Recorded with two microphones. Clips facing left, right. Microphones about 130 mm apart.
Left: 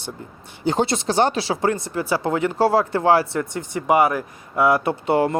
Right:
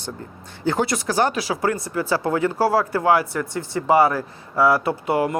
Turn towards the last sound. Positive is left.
turn(degrees=30)  # may be behind; listen again after turning